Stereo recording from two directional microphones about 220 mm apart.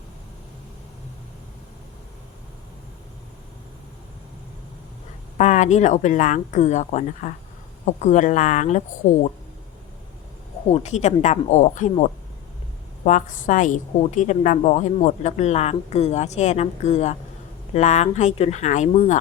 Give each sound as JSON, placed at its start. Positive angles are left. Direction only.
{"t": 5.4, "sound": "a woman's voice", "side_deg": 30}
{"t": 10.7, "sound": "a woman's voice", "side_deg": 30}